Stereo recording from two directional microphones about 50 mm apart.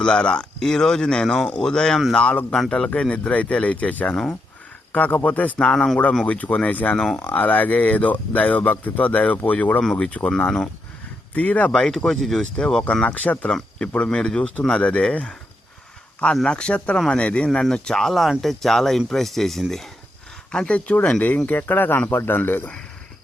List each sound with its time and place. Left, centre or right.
0.0 s speech: centre
4.9 s speech: left
5.5 s speech: centre
6.2 s speech: left
11.3 s speech: left
11.7 s speech: centre
13.1 s speech: left
13.5 s speech: centre
13.8 s speech: left
16.3 s speech: centre
20.5 s speech: left